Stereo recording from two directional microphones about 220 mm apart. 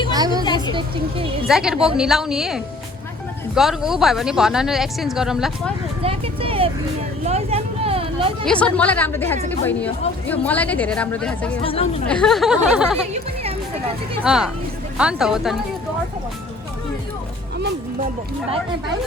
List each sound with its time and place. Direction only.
0.1 s a sound: 20° right (ahead or behind)
0.4 s a sound: 20° left (ahead or behind)
0.7 s a woman's voice: 25° right (ahead or behind)
1.5 s speech: centre (ahead or behind)
6.0 s vehicle: 25° right (ahead or behind)
7.3 s speech: 30° right (ahead or behind)
8.4 s speech: 5° left (ahead or behind)
11.6 s speech: 25° left (ahead or behind)
12.0 s speech: 5° left (ahead or behind)
14.3 s speech: 5° right (ahead or behind)